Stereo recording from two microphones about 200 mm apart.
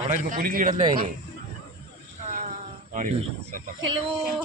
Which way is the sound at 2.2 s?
35° right (ahead or behind).